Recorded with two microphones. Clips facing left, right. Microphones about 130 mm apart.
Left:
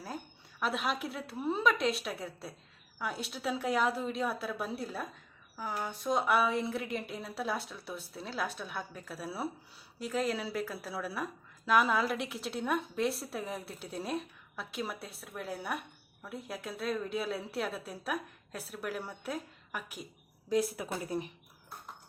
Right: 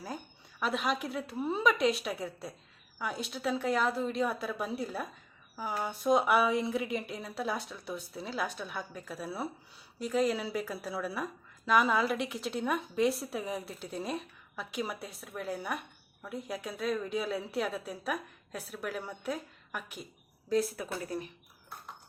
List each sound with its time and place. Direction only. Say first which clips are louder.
0.6 s a woman's voice: right 1 dB; centre (ahead or behind)
20.5 s speech: right 1 dB; 15° left (ahead or behind)